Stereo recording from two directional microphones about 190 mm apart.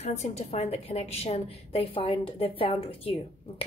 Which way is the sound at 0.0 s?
35° left (ahead or behind).